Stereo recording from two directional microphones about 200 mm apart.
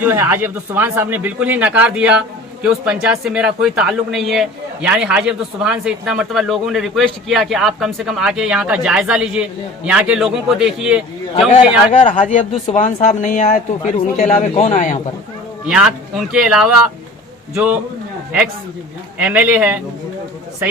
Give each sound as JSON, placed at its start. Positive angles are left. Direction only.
{"t": 0.0, "sound": "speech", "side_deg": -10}
{"t": 12.0, "sound": "speech", "side_deg": 40}
{"t": 15.6, "sound": "speech", "side_deg": -5}
{"t": 19.2, "sound": "speech", "side_deg": -5}